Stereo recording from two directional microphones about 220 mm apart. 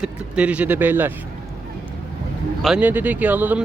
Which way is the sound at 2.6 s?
5° right (ahead or behind).